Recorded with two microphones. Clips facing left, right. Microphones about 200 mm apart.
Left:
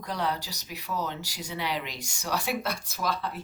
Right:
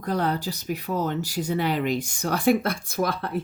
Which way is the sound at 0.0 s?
50° right (ahead or behind).